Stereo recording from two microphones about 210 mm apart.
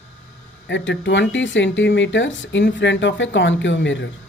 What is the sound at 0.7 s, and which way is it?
Speech, 60° left (ahead or behind).